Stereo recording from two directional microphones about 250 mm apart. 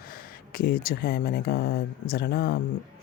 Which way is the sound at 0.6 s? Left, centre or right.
Left.